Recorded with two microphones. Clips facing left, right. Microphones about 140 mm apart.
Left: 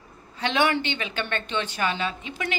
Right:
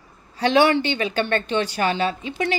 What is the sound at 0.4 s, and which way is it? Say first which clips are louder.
A woman's voice: right 6 dB; 35° right (ahead or behind).